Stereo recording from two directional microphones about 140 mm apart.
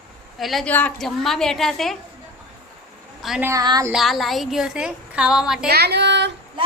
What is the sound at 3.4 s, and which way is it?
Speech, 25° right (ahead or behind).